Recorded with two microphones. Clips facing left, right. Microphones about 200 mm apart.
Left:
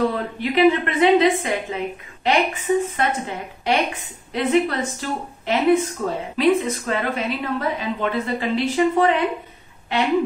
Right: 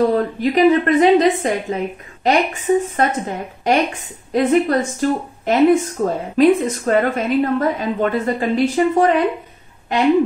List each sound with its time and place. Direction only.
0.1 s a woman's voice: 40° right (ahead or behind)